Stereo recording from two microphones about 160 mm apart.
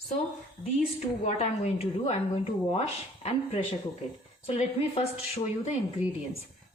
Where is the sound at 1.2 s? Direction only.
45° left (ahead or behind).